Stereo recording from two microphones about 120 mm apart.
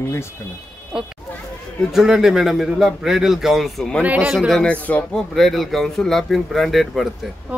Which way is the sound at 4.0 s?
15° right (ahead or behind).